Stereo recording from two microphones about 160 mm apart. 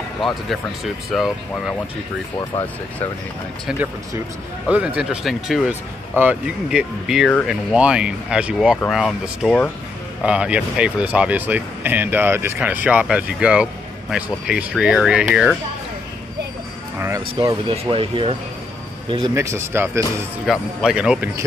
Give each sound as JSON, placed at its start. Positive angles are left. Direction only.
{"t": 1.1, "sound": "speech", "side_deg": 0}
{"t": 4.6, "sound": "speech", "side_deg": -5}
{"t": 17.6, "sound": "speech", "side_deg": -30}
{"t": 19.3, "sound": "speech", "side_deg": -15}
{"t": 20.4, "sound": "speech", "side_deg": -5}